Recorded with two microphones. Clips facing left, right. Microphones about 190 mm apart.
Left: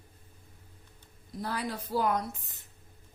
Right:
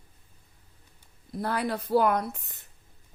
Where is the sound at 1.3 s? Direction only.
60° right (ahead or behind).